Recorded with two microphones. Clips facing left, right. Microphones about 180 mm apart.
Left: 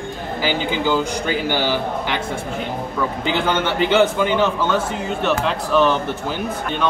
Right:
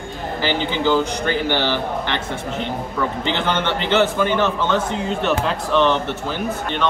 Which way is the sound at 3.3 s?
10° left (ahead or behind).